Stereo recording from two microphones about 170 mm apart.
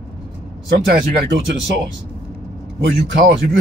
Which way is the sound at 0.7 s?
75° right (ahead or behind).